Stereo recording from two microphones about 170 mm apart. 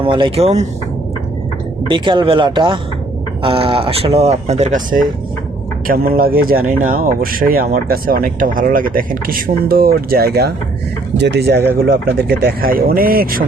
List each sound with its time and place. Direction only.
0.0 s speech: 30° right (ahead or behind)
1.9 s speech: 30° right (ahead or behind); by 10.5 s 65° right (ahead or behind)
11.2 s speech: 85° right; by 13.4 s 55° right (ahead or behind)